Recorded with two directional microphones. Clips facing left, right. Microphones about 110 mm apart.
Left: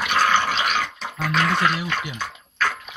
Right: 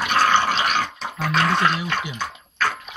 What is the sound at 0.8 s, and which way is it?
Music, 20° right (ahead or behind).